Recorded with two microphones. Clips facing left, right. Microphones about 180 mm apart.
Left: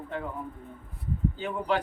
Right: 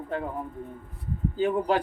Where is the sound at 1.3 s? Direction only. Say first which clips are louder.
Right 8 dB; 35° right (ahead or behind).